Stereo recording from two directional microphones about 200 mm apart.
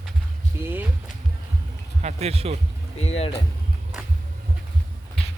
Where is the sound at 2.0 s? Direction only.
30° right (ahead or behind).